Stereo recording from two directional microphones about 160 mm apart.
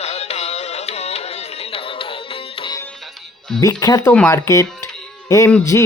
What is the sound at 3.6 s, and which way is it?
Speech, 20° left (ahead or behind).